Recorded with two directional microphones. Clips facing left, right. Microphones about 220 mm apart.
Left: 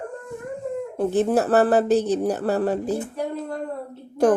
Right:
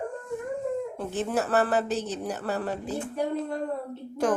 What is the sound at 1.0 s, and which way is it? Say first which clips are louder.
Speech: left 12 dB; 40° left (ahead or behind).